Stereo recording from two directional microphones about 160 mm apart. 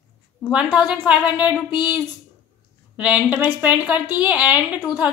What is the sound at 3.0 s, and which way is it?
A woman's voice, 10° right (ahead or behind).